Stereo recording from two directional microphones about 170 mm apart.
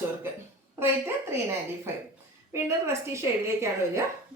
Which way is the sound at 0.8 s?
15° right (ahead or behind).